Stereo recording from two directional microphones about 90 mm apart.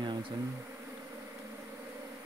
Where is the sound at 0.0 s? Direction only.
60° right (ahead or behind).